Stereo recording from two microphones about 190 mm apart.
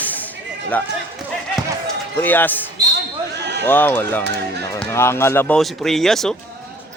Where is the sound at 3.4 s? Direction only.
65° right (ahead or behind).